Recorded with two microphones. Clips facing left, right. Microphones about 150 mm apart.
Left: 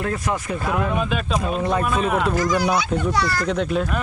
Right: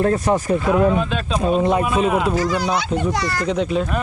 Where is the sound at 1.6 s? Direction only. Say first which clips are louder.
Right 3 dB; 15° right (ahead or behind).